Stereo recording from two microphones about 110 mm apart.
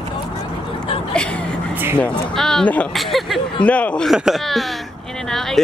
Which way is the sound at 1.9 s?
5° left (ahead or behind).